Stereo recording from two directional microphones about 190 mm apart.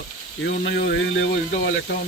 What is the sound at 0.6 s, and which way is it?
Speech, 75° left (ahead or behind).